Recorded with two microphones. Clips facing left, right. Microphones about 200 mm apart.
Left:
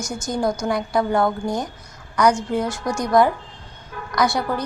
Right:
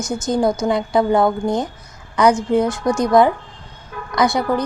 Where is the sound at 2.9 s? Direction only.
20° right (ahead or behind).